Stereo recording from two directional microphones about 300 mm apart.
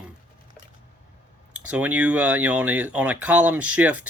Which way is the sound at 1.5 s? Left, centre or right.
Centre.